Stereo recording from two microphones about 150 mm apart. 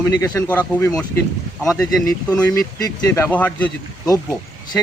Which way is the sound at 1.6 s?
Centre (ahead or behind).